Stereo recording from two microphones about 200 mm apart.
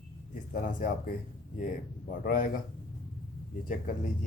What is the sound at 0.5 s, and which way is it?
Speech, 45° left (ahead or behind).